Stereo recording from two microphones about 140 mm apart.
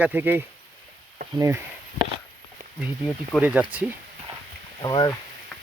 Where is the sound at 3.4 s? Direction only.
10° right (ahead or behind).